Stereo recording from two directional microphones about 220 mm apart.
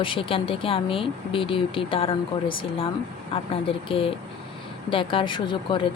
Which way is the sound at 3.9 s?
25° left (ahead or behind).